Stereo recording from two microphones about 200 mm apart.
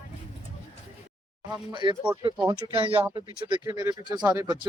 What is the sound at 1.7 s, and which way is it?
Speech, 25° right (ahead or behind).